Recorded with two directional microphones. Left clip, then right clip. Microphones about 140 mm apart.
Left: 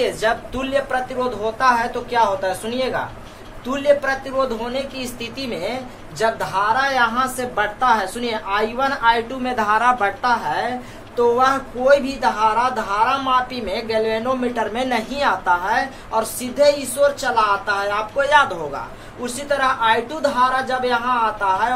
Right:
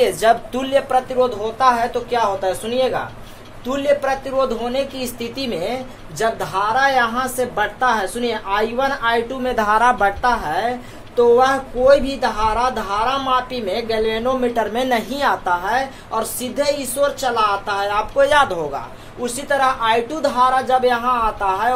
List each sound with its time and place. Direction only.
0.0 s a woman's voice: 70° right (ahead or behind)
1.6 s speech: 45° right (ahead or behind)